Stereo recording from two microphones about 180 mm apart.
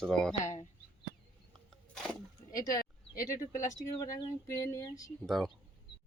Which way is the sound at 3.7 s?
20° left (ahead or behind).